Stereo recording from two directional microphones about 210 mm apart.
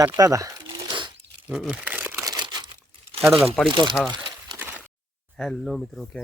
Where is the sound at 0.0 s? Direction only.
15° right (ahead or behind).